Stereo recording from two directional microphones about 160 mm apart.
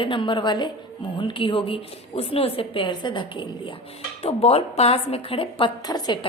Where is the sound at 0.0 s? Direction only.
30° left (ahead or behind).